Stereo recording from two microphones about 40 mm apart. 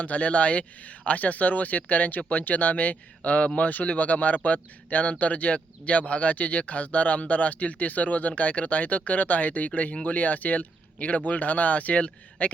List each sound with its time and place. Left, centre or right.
0.0 s speech: left